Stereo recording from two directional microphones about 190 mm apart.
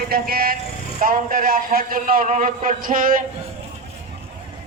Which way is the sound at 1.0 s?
50° right (ahead or behind).